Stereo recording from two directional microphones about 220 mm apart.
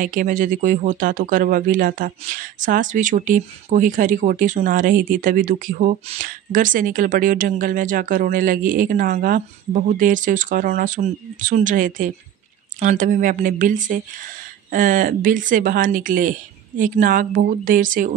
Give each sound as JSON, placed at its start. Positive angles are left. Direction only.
{"t": 0.0, "sound": "speech", "side_deg": -40}